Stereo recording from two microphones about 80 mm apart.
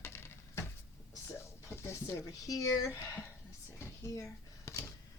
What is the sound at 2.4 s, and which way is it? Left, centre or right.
Speech, left.